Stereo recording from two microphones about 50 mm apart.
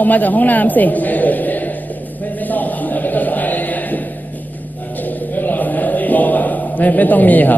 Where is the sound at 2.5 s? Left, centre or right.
Left.